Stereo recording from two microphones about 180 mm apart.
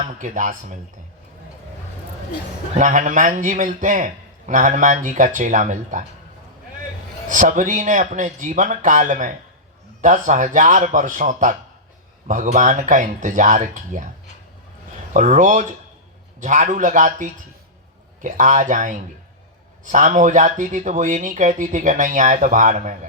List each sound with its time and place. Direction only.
0.0 s speech: 45° right (ahead or behind)
2.7 s a man's voice: 45° right (ahead or behind)
7.3 s a man's voice: 45° right (ahead or behind)
15.1 s a man's voice: 45° right (ahead or behind)